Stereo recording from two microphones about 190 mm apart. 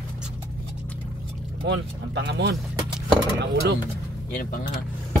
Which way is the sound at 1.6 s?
65° right (ahead or behind).